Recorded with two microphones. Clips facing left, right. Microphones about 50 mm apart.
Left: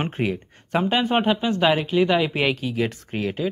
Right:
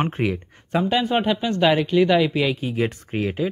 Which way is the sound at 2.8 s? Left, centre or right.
Centre.